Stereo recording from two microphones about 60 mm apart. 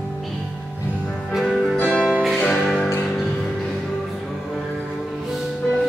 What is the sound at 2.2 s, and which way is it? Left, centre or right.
Music, centre.